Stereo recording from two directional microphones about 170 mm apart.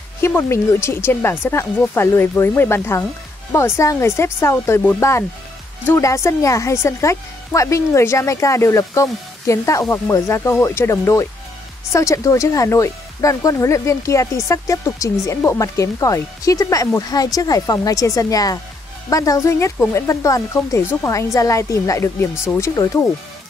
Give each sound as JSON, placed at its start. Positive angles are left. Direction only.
{"t": 0.2, "sound": "speech", "side_deg": 15}